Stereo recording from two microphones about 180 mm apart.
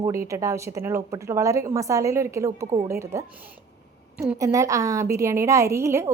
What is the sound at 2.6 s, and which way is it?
Speech, 30° right (ahead or behind).